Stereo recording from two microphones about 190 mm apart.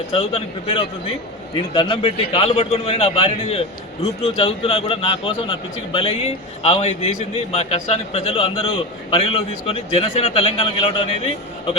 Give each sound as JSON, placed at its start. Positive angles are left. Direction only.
{"t": 0.1, "sound": "a man's voice", "side_deg": 30}